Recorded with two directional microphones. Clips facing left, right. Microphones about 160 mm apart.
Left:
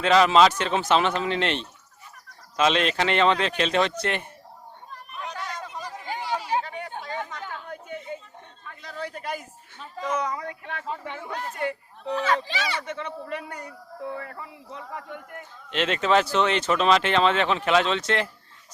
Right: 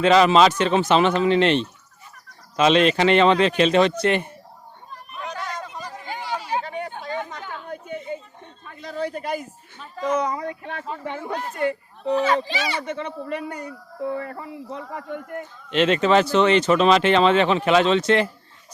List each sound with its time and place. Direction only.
0.0 s speech: centre (ahead or behind)
5.1 s a sound: 5° right (ahead or behind)
6.7 s chatter: 35° right (ahead or behind)
8.6 s a sound: 25° right (ahead or behind)
10.0 s a man's voice: 30° right (ahead or behind)
12.0 s a child's voice: 20° right (ahead or behind)
12.8 s speech: 25° right (ahead or behind)
14.2 s a man's voice: 35° right (ahead or behind)
15.7 s speech: centre (ahead or behind)